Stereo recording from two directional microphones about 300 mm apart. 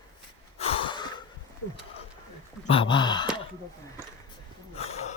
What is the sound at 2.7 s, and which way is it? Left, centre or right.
Speech, centre.